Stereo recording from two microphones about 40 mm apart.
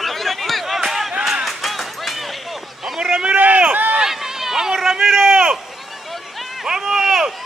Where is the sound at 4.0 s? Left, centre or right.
Centre.